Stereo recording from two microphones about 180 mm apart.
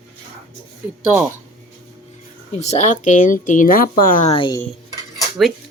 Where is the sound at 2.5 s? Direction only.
35° left (ahead or behind).